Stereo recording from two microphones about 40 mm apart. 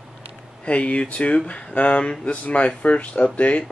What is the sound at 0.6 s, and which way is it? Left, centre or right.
Speech, left.